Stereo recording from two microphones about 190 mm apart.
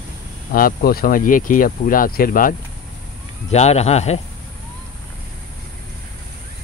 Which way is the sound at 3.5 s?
35° left (ahead or behind).